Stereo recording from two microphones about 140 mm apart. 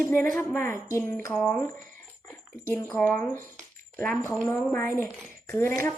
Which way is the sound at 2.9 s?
15° left (ahead or behind).